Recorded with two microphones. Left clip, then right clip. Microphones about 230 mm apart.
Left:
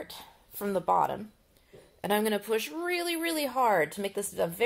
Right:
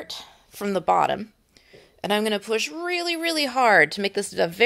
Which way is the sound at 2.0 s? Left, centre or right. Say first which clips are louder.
Right 5 dB; right.